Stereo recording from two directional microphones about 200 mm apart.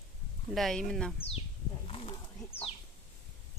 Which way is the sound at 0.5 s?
Centre (ahead or behind).